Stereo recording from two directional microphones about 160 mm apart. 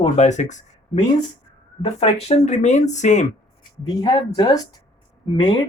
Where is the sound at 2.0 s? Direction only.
45° left (ahead or behind).